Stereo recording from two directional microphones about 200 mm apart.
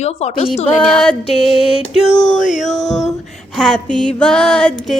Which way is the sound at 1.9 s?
35° left (ahead or behind).